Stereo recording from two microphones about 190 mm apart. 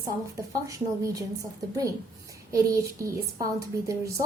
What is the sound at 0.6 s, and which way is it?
Speech, 15° right (ahead or behind).